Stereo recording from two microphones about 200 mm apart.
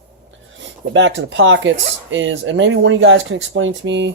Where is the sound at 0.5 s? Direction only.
70° right (ahead or behind).